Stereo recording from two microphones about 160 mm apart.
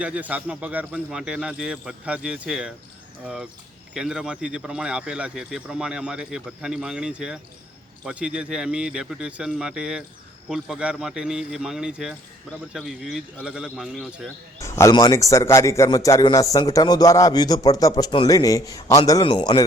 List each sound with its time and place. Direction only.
0.0 s speech: 10° right (ahead or behind)
14.6 s a man's voice: 20° left (ahead or behind)